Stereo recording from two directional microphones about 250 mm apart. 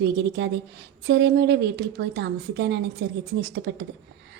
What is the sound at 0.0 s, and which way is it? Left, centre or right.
A woman's voice, right.